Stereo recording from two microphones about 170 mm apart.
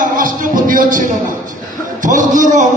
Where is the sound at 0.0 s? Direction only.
50° right (ahead or behind).